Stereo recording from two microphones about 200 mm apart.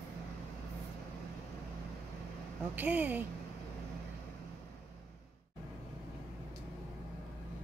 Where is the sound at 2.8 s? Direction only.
10° right (ahead or behind).